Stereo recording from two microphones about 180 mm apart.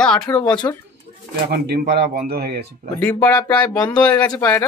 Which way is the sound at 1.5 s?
60° right (ahead or behind).